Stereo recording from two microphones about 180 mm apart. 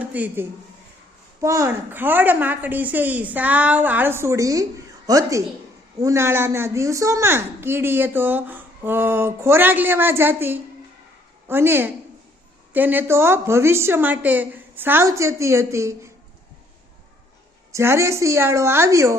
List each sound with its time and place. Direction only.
0.0 s a man's voice: 10° right (ahead or behind)
17.7 s a woman's voice: 15° right (ahead or behind)